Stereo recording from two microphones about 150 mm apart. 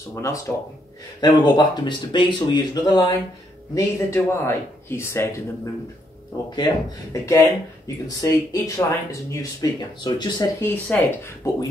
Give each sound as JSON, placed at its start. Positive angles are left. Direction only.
{"t": 0.1, "sound": "speech", "side_deg": 20}
{"t": 1.2, "sound": "speech", "side_deg": 30}
{"t": 3.7, "sound": "a man's voice", "side_deg": 15}
{"t": 6.5, "sound": "speech", "side_deg": 25}
{"t": 10.6, "sound": "a man's voice", "side_deg": 15}